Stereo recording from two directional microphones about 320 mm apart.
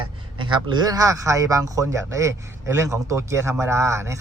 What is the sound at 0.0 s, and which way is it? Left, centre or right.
Speech, centre.